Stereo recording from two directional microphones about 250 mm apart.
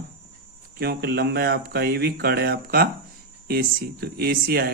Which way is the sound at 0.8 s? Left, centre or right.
Right.